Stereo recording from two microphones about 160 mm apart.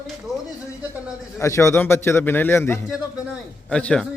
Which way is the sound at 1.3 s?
20° left (ahead or behind).